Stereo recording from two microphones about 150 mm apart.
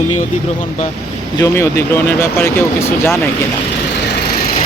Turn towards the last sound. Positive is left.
turn(degrees=15)  # may be behind; listen again after turning